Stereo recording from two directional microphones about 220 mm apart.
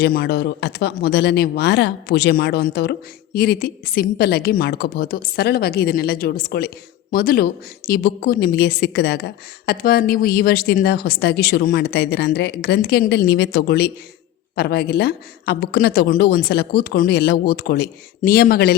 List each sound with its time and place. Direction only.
0.0 s a woman's voice: 45° left (ahead or behind)